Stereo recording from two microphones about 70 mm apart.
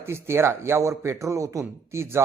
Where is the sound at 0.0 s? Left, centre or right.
Right.